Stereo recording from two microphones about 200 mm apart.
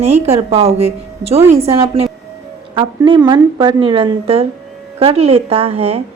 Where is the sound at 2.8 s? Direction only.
25° right (ahead or behind).